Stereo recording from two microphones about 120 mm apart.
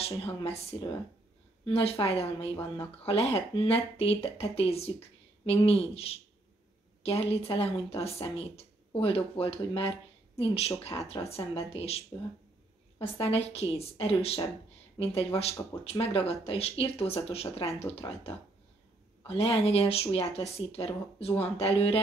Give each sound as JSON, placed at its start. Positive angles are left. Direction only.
{"t": 0.2, "sound": "speech", "side_deg": 55}
{"t": 10.9, "sound": "speech", "side_deg": 35}
{"t": 11.2, "sound": "speech", "side_deg": 55}
{"t": 13.2, "sound": "speech", "side_deg": 60}